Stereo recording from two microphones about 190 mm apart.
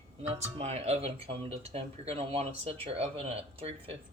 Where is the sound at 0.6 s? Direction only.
35° right (ahead or behind).